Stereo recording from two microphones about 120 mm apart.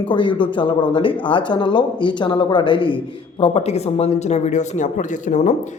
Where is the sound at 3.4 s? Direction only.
60° left (ahead or behind); by 5.6 s 90° left.